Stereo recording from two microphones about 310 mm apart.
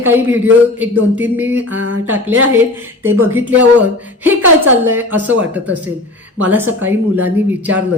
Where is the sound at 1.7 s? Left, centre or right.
Right.